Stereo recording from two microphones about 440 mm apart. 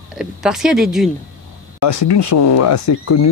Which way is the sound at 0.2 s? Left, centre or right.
Centre.